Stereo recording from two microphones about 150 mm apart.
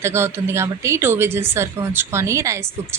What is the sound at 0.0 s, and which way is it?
A woman's voice, 15° right (ahead or behind).